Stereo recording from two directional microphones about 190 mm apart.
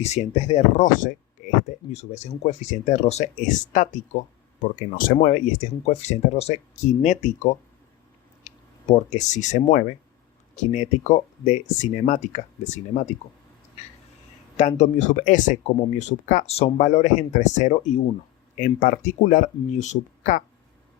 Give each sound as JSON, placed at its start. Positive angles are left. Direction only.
{"t": 0.0, "sound": "speech", "side_deg": 35}
{"t": 1.4, "sound": "a sound", "side_deg": 45}
{"t": 1.9, "sound": "speech", "side_deg": 35}
{"t": 14.5, "sound": "speech", "side_deg": 35}